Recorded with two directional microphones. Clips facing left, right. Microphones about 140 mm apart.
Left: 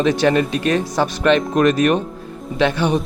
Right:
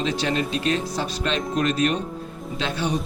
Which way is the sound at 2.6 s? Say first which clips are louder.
Left 8 dB; 70° left (ahead or behind).